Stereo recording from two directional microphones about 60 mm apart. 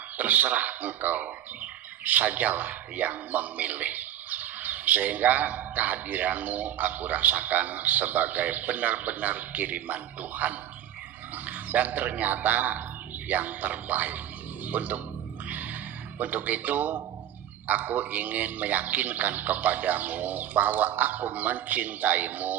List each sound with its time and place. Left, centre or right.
0.2 s a man's voice: right
15.4 s music: right
16.1 s a man's voice: right